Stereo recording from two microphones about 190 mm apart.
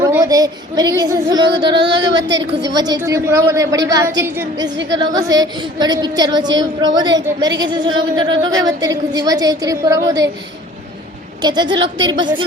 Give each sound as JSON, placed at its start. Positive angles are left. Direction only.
{"t": 0.0, "sound": "a woman's voice", "side_deg": -15}
{"t": 1.5, "sound": "speech", "side_deg": -65}
{"t": 2.7, "sound": "a woman's voice", "side_deg": -20}
{"t": 11.4, "sound": "a woman's voice", "side_deg": -25}